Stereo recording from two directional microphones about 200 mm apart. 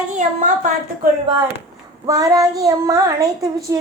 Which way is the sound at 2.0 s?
15° right (ahead or behind).